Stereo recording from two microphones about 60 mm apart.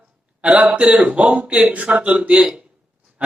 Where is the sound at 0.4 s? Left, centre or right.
Right.